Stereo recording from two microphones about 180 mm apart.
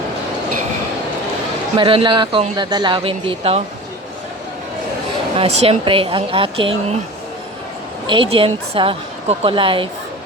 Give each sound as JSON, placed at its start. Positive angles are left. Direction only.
{"t": 1.7, "sound": "a woman's voice", "side_deg": -30}
{"t": 5.4, "sound": "a woman's voice", "side_deg": -35}
{"t": 8.0, "sound": "a woman's voice", "side_deg": -30}